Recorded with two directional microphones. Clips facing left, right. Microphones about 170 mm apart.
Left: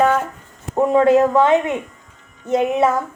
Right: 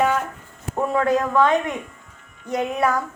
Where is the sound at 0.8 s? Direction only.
20° left (ahead or behind).